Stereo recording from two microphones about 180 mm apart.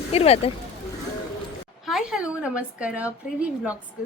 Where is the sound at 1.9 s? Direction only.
5° right (ahead or behind).